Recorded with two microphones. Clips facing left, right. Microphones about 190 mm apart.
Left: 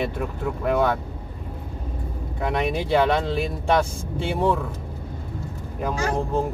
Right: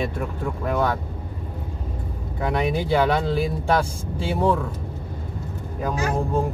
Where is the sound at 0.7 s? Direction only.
5° left (ahead or behind).